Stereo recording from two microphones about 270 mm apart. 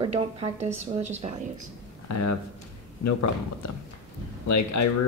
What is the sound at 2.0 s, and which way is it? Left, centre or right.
Speech, left.